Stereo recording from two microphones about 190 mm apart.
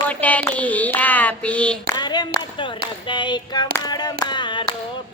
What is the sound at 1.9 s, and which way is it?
Clapping, 20° left (ahead or behind).